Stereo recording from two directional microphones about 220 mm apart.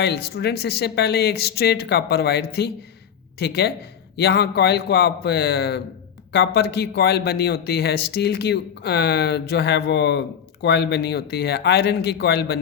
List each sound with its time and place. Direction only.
0.0 s speech: 45° left (ahead or behind)